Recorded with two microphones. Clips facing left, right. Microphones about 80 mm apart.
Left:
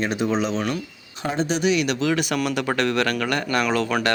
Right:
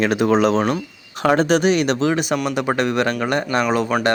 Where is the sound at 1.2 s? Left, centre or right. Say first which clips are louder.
Right 8 dB; right.